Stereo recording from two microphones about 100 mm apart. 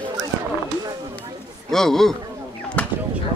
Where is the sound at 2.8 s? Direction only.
15° left (ahead or behind).